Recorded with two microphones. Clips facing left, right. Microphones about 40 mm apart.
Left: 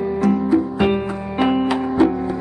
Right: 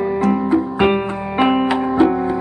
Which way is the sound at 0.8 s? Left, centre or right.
Right.